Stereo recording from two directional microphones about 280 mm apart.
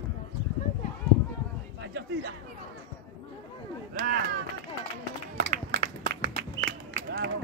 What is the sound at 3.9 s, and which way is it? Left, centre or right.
Speech, right.